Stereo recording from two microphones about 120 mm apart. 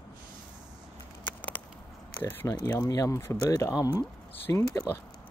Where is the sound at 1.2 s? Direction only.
15° left (ahead or behind).